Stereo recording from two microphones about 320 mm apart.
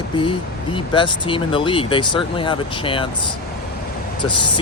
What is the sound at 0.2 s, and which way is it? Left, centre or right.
Speech, centre.